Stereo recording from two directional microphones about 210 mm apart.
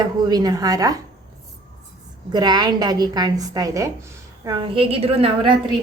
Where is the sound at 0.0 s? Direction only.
20° right (ahead or behind).